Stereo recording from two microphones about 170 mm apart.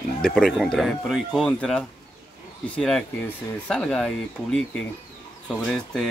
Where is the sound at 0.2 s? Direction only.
5° left (ahead or behind).